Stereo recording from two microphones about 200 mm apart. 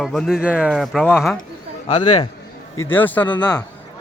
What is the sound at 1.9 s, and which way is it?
Speech, 30° left (ahead or behind).